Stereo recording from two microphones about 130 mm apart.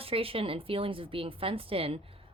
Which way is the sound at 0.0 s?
45° right (ahead or behind).